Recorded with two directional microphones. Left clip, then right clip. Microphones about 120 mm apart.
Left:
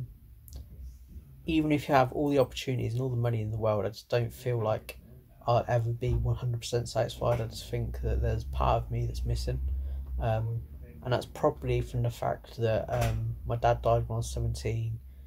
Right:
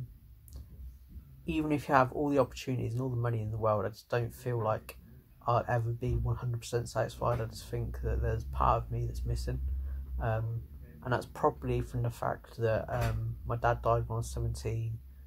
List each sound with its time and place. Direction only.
1.4 s speech: 10° left (ahead or behind)